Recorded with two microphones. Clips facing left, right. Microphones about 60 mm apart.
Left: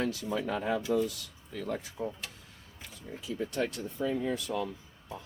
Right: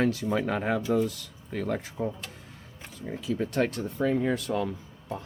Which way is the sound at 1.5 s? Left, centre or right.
Right.